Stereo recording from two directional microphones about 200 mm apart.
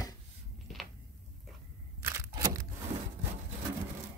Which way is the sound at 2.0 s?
15° right (ahead or behind).